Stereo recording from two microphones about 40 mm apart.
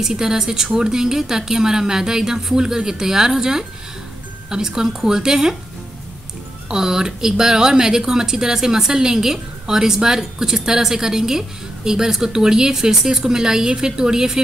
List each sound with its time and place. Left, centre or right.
0.0 s speech: centre
6.7 s speech: centre